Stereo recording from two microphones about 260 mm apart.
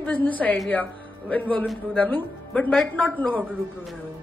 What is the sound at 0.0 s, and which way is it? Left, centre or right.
Speech, centre.